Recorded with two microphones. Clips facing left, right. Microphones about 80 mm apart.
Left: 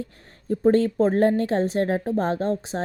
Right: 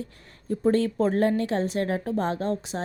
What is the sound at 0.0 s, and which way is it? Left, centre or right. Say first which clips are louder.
A woman's voice: left 2 dB; left.